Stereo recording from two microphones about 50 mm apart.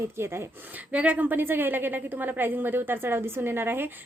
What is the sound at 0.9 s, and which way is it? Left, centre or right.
A woman's voice, right.